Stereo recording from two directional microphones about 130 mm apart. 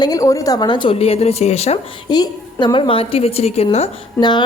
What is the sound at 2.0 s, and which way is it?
Speech, 35° left (ahead or behind).